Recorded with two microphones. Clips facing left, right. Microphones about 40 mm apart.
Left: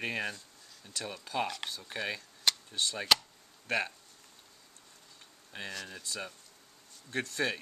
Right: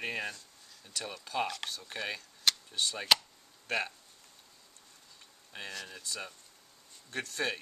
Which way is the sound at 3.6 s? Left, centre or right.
Centre.